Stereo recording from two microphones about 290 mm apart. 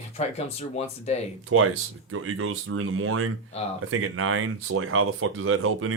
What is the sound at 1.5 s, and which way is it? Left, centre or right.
A man's voice, right.